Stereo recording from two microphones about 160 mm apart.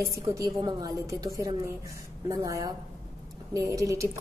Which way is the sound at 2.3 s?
20° right (ahead or behind).